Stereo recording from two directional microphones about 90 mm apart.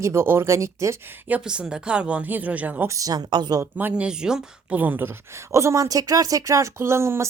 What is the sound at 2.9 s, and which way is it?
Speech, 40° right (ahead or behind).